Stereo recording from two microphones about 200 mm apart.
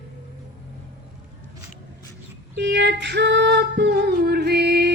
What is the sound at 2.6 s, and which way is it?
Female singing, 60° right (ahead or behind).